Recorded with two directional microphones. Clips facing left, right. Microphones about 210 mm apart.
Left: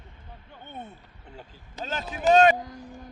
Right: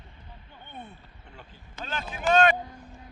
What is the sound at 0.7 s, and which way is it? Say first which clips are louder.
Speech: left 3 dB; 45° left (ahead or behind).